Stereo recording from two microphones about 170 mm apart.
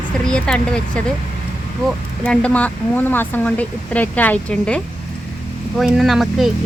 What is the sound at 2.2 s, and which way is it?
Speech, 5° left (ahead or behind).